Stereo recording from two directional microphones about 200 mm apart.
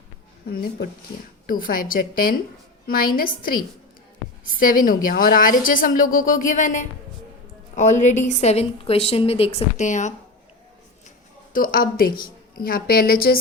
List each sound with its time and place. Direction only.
0.4 s speech: 50° left (ahead or behind)
4.6 s a woman's voice: 45° left (ahead or behind)
11.5 s speech: 45° left (ahead or behind)